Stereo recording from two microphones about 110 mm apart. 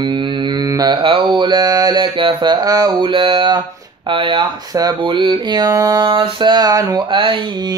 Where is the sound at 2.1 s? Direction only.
50° right (ahead or behind).